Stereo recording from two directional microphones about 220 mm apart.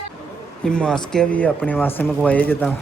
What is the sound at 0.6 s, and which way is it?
Speech, 5° left (ahead or behind).